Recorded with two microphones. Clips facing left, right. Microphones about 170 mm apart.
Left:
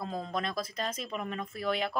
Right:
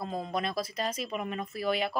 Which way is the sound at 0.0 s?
5° right (ahead or behind).